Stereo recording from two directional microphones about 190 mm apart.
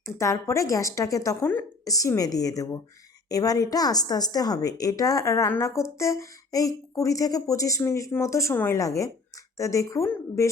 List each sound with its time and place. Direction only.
0.0 s a woman's voice: 15° left (ahead or behind)